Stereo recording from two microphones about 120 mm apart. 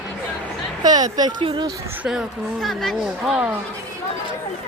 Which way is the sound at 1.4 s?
45° right (ahead or behind).